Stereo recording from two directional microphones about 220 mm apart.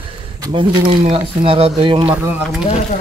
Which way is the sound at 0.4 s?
20° right (ahead or behind).